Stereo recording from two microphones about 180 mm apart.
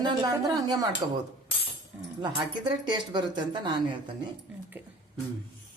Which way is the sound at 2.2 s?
25° right (ahead or behind).